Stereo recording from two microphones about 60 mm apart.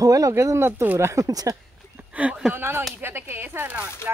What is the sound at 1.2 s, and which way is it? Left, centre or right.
Speech, right.